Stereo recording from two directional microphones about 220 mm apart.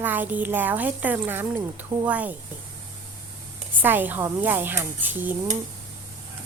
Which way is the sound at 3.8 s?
10° right (ahead or behind).